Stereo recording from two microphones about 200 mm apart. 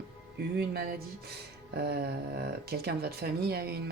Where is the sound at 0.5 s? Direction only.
50° right (ahead or behind).